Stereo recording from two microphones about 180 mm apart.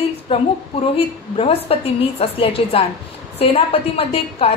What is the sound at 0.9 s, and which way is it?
A woman's voice, 35° left (ahead or behind).